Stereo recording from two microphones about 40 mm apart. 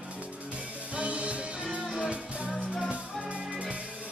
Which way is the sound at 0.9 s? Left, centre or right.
Right.